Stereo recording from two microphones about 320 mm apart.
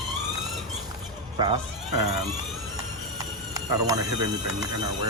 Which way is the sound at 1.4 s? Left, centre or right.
Centre.